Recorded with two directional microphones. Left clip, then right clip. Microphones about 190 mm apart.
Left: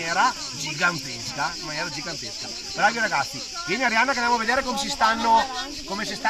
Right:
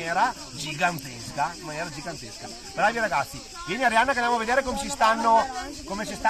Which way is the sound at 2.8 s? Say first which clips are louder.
Left 2 dB; 25° right (ahead or behind).